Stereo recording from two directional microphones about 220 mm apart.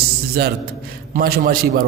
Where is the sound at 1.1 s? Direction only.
40° right (ahead or behind).